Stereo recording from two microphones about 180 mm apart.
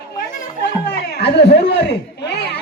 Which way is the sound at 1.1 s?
65° left (ahead or behind).